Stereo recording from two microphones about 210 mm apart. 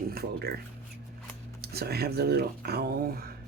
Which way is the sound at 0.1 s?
45° right (ahead or behind).